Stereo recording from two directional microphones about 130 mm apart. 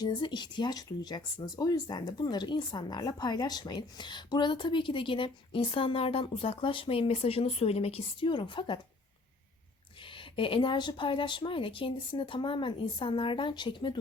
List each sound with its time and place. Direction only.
0.0 s speech: 35° left (ahead or behind)
8.3 s speech: 40° left (ahead or behind)
10.2 s speech: 40° left (ahead or behind)